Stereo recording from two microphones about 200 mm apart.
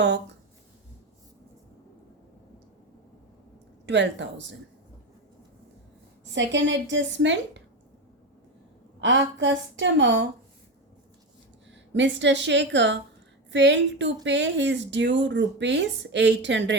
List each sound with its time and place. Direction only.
0.0 s speech: 60° right (ahead or behind)
3.8 s speech: 60° right (ahead or behind)
6.3 s speech: 65° right (ahead or behind)
9.0 s speech: 65° right (ahead or behind)
11.7 s speech: 65° right (ahead or behind)